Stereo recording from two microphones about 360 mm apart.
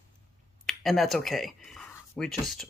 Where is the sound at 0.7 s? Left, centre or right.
Centre.